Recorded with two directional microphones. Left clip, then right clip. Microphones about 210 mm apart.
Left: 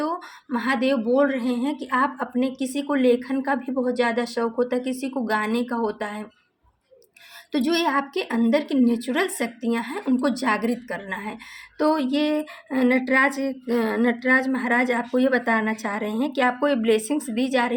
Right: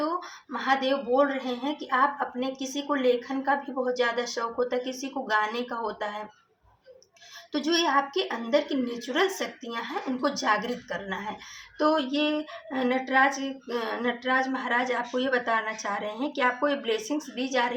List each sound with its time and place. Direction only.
0.5 s a woman's voice: 45° left (ahead or behind)
7.5 s a woman's voice: 45° left (ahead or behind)